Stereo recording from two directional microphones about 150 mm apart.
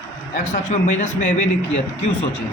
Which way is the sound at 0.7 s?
50° left (ahead or behind).